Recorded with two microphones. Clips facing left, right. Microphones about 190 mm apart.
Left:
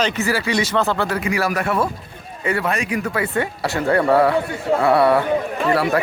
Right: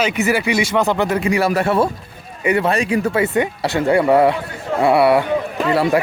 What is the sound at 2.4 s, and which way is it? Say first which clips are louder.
Speech: right 5 dB; 15° right (ahead or behind).